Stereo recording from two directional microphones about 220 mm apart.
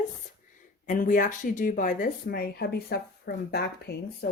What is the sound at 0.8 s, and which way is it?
Speech, 35° left (ahead or behind).